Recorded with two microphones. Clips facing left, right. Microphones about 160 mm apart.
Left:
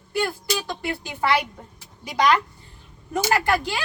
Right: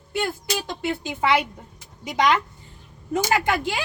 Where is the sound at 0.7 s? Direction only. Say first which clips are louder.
Right 2 dB; 20° right (ahead or behind).